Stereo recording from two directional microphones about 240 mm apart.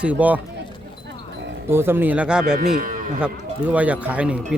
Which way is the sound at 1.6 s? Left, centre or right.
Centre.